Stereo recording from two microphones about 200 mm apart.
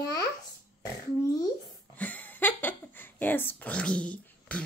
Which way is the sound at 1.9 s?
10° left (ahead or behind).